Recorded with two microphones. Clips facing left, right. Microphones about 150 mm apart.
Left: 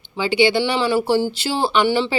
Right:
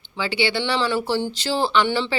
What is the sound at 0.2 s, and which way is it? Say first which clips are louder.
Speech: left 6 dB; 15° left (ahead or behind).